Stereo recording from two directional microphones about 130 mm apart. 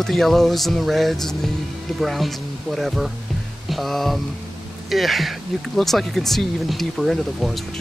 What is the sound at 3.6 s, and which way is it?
Music, centre (ahead or behind).